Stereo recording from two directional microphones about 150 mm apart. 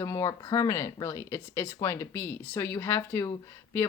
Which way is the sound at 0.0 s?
20° left (ahead or behind).